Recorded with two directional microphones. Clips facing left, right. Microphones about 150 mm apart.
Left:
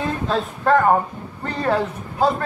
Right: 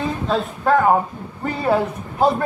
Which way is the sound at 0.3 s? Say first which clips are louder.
Even; 5° right (ahead or behind).